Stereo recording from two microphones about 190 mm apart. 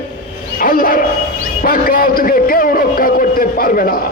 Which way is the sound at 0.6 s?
50° left (ahead or behind).